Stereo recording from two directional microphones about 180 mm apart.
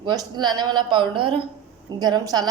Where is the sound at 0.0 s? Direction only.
25° right (ahead or behind).